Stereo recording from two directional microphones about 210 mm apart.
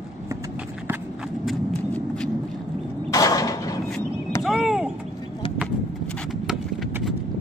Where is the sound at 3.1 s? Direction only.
15° left (ahead or behind).